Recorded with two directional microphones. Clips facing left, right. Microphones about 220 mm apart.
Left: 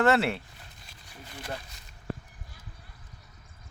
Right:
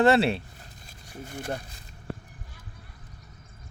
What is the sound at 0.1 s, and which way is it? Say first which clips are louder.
Speech: right 3 dB; 20° right (ahead or behind).